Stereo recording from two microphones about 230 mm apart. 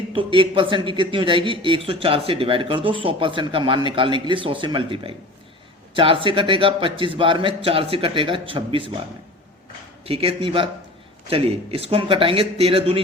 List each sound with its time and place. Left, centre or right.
0.1 s a man's voice: right
10.1 s a man's voice: right